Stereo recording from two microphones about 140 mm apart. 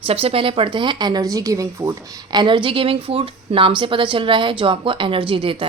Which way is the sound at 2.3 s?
35° right (ahead or behind).